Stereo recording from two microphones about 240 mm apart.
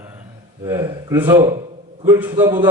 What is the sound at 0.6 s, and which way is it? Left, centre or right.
A man's voice, centre.